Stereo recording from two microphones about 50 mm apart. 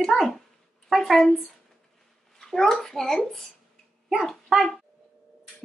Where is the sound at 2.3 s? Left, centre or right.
Centre.